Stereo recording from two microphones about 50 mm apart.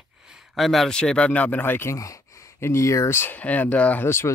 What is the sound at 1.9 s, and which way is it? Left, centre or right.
Speech, left.